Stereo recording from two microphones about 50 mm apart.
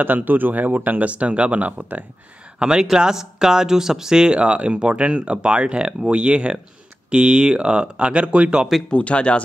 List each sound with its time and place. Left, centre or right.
0.0 s speech: right
2.6 s speech: centre
8.9 s speech: left